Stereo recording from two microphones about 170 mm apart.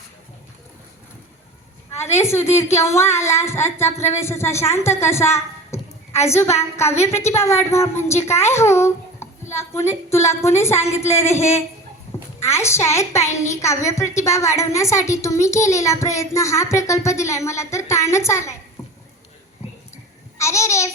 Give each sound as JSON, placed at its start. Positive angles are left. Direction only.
{"t": 2.0, "sound": "a woman's voice", "side_deg": 15}
{"t": 18.8, "sound": "a sound", "side_deg": 20}
{"t": 20.4, "sound": "a child's voice", "side_deg": 15}